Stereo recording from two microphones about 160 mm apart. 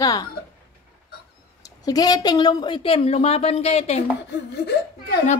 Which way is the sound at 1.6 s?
25° left (ahead or behind).